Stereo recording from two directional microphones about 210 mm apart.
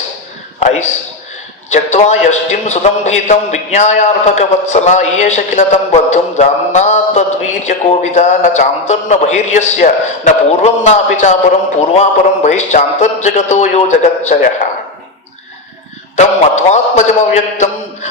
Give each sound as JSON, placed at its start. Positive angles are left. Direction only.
{"t": 0.6, "sound": "a man's voice", "side_deg": 35}
{"t": 16.1, "sound": "a man's voice", "side_deg": 35}